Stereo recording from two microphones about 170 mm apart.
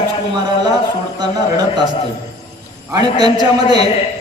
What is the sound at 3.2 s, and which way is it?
Speech, 25° right (ahead or behind).